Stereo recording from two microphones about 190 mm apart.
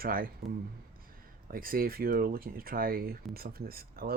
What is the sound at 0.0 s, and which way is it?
Speech, 50° right (ahead or behind).